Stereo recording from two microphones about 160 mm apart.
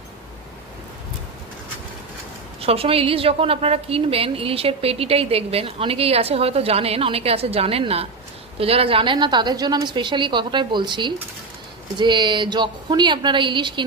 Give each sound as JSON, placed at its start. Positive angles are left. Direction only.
{"t": 2.6, "sound": "a woman's voice", "side_deg": -35}